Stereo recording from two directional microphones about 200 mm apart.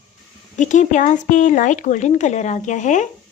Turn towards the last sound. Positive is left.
turn(degrees=40)  # may be behind; listen again after turning